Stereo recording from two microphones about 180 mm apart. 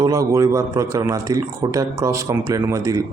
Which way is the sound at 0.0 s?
15° right (ahead or behind).